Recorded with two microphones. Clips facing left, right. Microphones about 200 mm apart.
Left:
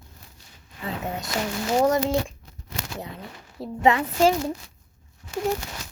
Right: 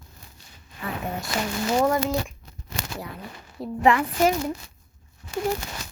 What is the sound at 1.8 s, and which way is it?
Speech, 25° left (ahead or behind).